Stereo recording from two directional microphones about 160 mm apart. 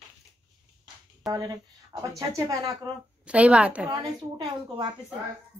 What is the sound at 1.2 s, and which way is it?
Speech, 25° right (ahead or behind).